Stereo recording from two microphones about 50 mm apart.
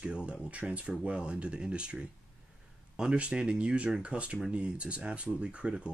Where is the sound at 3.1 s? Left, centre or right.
Right.